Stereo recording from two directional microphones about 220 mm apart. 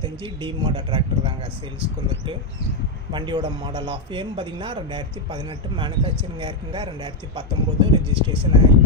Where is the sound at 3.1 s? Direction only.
20° right (ahead or behind).